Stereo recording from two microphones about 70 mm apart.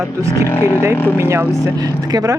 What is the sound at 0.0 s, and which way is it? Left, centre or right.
Speech, right.